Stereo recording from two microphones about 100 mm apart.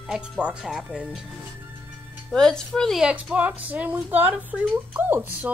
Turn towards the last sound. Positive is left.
turn(degrees=-20)  # may be behind; listen again after turning